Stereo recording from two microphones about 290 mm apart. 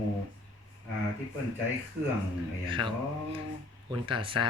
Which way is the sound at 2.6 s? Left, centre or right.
Centre.